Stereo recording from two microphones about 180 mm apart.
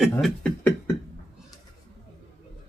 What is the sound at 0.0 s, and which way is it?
Beatboxing, centre (ahead or behind).